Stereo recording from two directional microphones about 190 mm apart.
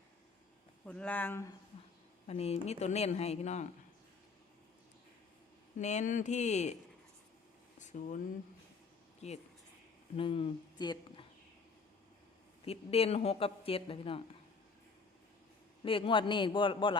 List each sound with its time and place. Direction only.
0.9 s speech: 5° left (ahead or behind)
2.2 s speech: 35° left (ahead or behind)
5.8 s speech: 40° left (ahead or behind)
7.8 s a sound: 40° left (ahead or behind)
9.2 s speech: 35° left (ahead or behind)
12.6 s speech: 30° left (ahead or behind)
15.8 s a man's voice: 30° left (ahead or behind)